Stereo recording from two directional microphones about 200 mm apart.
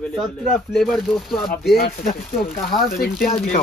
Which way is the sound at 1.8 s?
45° left (ahead or behind).